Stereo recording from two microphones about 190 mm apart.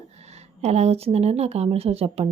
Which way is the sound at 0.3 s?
35° right (ahead or behind).